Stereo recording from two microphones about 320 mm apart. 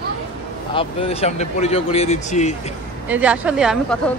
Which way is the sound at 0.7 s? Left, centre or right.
Centre.